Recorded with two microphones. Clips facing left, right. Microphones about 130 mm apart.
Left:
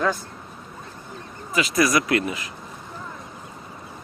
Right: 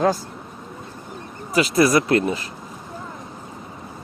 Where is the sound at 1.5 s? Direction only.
35° right (ahead or behind).